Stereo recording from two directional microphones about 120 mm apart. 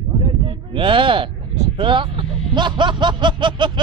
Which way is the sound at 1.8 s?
45° right (ahead or behind).